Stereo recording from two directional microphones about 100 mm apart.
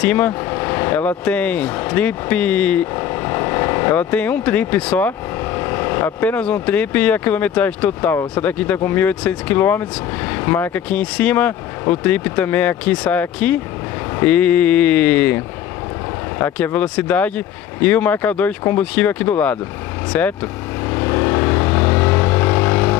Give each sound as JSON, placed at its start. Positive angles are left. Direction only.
{"t": 0.0, "sound": "speech", "side_deg": 15}
{"t": 3.0, "sound": "speech", "side_deg": 25}
{"t": 16.5, "sound": "speech", "side_deg": 15}
{"t": 20.9, "sound": "vehicle", "side_deg": 25}